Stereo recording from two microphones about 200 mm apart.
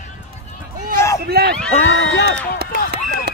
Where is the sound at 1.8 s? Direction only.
70° left (ahead or behind).